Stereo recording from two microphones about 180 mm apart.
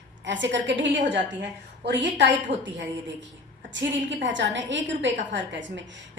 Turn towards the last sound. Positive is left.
turn(degrees=-85)